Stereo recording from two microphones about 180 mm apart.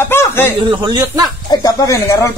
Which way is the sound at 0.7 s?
25° right (ahead or behind).